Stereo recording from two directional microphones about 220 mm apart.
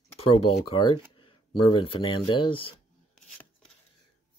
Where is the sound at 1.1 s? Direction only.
25° left (ahead or behind).